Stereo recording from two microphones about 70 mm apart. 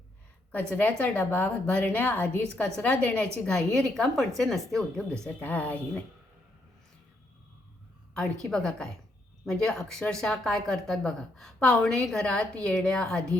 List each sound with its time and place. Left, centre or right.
0.8 s a woman's voice: left; by 5.0 s centre
5.4 s a woman's voice: left
8.1 s speech: centre